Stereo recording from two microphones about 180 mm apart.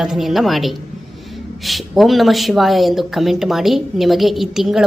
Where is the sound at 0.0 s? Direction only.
Centre (ahead or behind).